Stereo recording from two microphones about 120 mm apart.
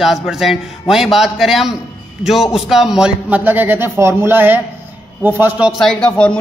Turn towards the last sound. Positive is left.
turn(degrees=10)  # may be behind; listen again after turning